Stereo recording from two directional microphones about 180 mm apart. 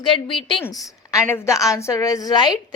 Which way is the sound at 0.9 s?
15° left (ahead or behind).